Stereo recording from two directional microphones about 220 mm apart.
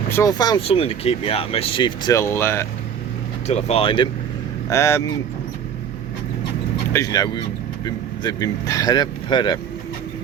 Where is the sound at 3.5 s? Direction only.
30° left (ahead or behind).